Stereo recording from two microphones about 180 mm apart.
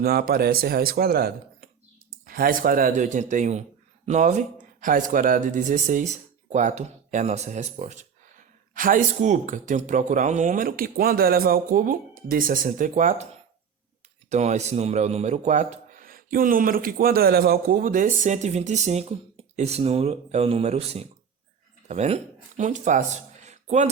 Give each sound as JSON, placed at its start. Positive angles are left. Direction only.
{"t": 0.0, "sound": "speech", "side_deg": -55}
{"t": 14.3, "sound": "a man's voice", "side_deg": -40}